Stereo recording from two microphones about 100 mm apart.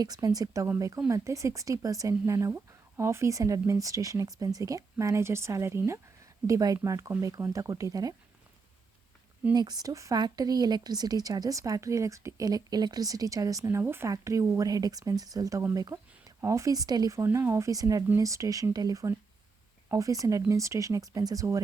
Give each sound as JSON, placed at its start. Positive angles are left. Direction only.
{"t": 0.0, "sound": "speech", "side_deg": -40}
{"t": 9.5, "sound": "speech", "side_deg": -40}